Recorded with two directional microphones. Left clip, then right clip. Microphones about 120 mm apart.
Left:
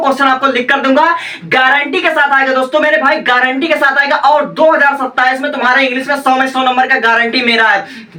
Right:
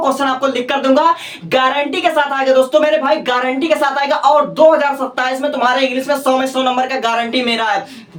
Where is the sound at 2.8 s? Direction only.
30° right (ahead or behind).